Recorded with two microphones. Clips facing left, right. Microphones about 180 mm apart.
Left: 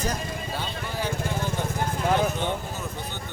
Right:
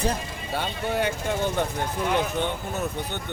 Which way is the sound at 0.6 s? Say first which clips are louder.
Right 9 dB; 65° right (ahead or behind).